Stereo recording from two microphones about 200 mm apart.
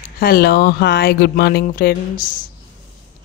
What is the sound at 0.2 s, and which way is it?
Speech, 50° left (ahead or behind).